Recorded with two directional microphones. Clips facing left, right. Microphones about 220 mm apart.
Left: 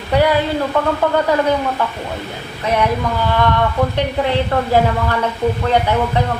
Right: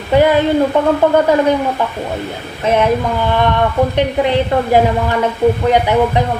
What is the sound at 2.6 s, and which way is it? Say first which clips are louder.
Speech: right 4 dB; 20° right (ahead or behind).